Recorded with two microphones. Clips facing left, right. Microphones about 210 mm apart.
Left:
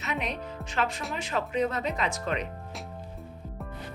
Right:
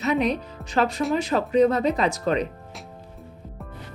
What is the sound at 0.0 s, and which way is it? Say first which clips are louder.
A woman's voice: right 10 dB; 35° right (ahead or behind).